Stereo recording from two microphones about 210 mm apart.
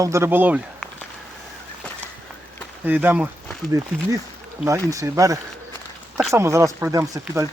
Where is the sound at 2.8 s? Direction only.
10° right (ahead or behind).